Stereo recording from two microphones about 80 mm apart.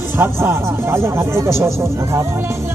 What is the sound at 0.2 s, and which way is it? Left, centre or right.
Speech, right.